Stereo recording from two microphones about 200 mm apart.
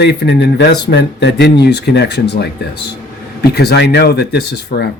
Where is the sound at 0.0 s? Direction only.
55° left (ahead or behind).